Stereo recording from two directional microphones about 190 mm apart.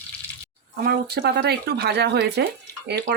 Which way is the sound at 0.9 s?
60° right (ahead or behind).